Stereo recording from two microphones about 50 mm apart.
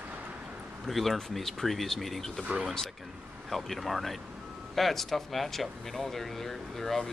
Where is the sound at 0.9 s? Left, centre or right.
Centre.